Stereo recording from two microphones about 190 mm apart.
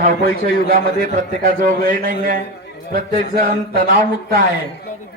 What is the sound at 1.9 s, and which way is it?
A man's voice, 50° right (ahead or behind).